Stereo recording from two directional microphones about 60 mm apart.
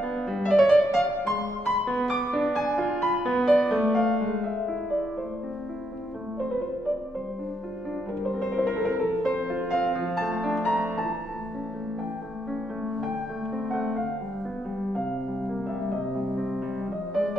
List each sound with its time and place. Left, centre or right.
0.3 s music: centre
4.3 s music: left
8.4 s music: centre
13.7 s music: centre
15.5 s music: centre